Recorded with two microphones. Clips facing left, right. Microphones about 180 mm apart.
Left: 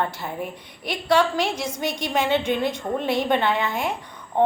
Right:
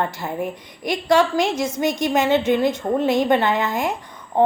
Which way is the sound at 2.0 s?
10° right (ahead or behind).